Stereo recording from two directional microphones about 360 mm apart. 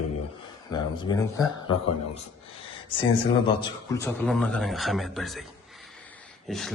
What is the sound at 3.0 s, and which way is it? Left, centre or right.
Speech, centre.